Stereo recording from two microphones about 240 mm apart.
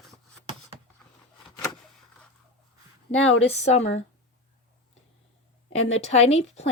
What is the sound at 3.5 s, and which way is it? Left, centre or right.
Speech, left.